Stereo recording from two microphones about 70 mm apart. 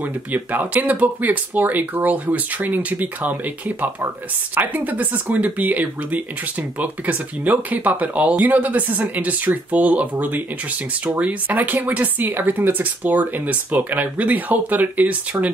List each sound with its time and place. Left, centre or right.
0.0 s speech: right